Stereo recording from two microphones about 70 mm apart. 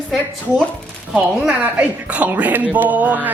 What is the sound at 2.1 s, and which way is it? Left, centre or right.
Speech, right.